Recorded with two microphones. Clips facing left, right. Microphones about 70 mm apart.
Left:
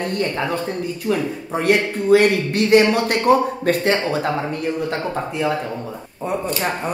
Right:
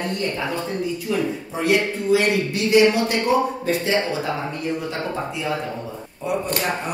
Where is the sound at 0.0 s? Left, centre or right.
Left.